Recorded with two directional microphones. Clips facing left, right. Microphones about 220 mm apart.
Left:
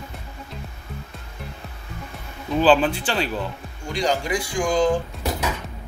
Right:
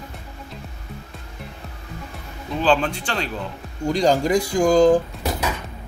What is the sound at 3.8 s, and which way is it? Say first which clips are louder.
Speech: right 6 dB; 40° right (ahead or behind).